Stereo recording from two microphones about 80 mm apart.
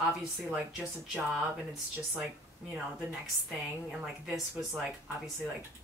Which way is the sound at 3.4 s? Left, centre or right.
Centre.